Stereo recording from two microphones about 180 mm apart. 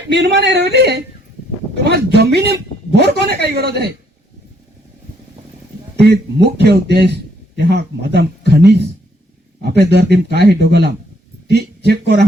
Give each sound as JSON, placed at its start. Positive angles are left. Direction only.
{"t": 0.1, "sound": "a man's voice", "side_deg": -75}
{"t": 6.0, "sound": "a man's voice", "side_deg": -65}